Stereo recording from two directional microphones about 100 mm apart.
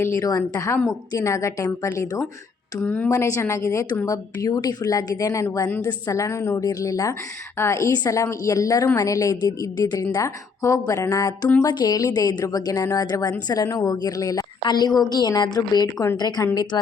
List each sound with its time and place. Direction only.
0.0 s a woman's voice: 25° left (ahead or behind)
0.3 s a woman's voice: 40° left (ahead or behind)
2.8 s a woman's voice: 15° left (ahead or behind)
3.1 s a woman's voice: 30° left (ahead or behind)
14.6 s a woman's voice: 45° left (ahead or behind)